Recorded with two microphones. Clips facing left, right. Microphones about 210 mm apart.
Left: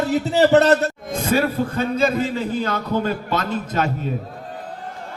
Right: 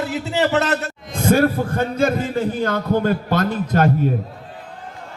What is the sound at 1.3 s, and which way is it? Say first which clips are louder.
A man's voice: right 3 dB; 50° right (ahead or behind).